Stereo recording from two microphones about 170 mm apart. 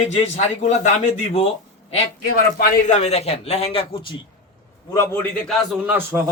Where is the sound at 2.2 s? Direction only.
60° left (ahead or behind); by 4.2 s 30° left (ahead or behind).